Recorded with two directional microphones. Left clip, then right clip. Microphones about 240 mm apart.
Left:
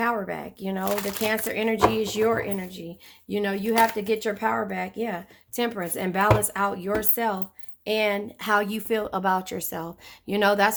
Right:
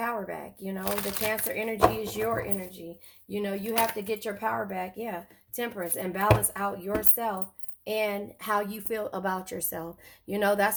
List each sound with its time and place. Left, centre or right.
0.0 s a woman's voice: left